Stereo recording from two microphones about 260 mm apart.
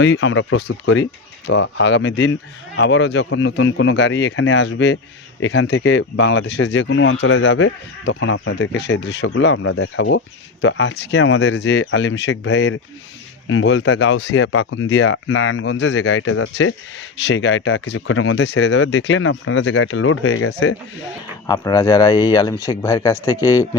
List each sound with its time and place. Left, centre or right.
0.0 s speech: left
21.4 s speech: centre